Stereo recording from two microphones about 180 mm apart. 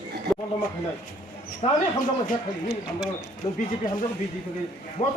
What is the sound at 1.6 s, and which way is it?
Speech, 35° left (ahead or behind).